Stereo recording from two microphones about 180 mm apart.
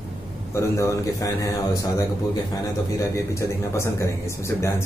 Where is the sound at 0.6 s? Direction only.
15° left (ahead or behind).